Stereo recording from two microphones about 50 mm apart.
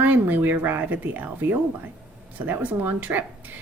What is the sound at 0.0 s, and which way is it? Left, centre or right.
A woman's voice, right.